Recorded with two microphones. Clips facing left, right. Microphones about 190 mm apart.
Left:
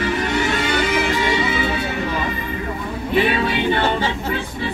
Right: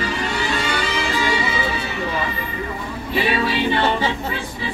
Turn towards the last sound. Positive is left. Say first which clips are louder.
# left 1 dB
turn(degrees=55)  # may be behind; listen again after turning